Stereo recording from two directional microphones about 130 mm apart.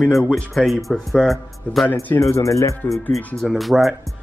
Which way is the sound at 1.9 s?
20° left (ahead or behind).